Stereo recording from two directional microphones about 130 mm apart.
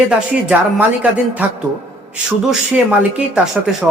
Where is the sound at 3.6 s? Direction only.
5° right (ahead or behind).